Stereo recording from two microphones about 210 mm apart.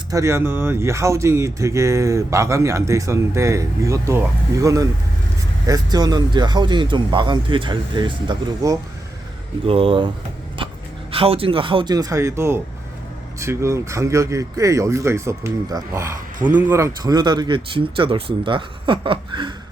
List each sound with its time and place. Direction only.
0.1 s speech: 15° right (ahead or behind)
10.6 s a sound: 25° right (ahead or behind)
11.1 s speech: 25° right (ahead or behind)